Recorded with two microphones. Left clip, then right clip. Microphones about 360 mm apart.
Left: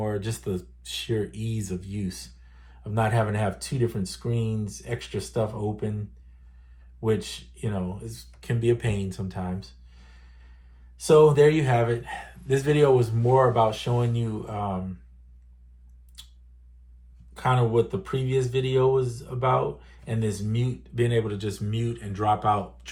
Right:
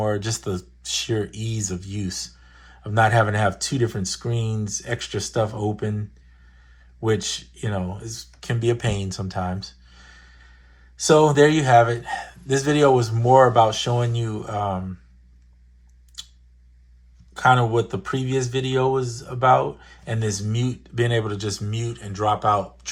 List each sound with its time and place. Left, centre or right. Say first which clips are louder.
0.0 s speech: right 6 dB; centre
7.0 s speech: right 4 dB; centre
17.3 s speech: right 6 dB; centre